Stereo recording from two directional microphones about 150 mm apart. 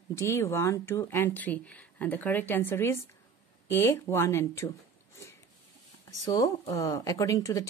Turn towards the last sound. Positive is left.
turn(degrees=20)  # may be behind; listen again after turning